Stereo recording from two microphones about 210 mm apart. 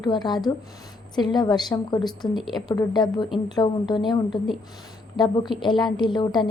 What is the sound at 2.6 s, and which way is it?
A woman's voice, 20° left (ahead or behind).